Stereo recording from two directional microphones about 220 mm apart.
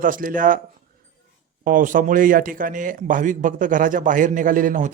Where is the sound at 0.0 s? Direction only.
40° right (ahead or behind).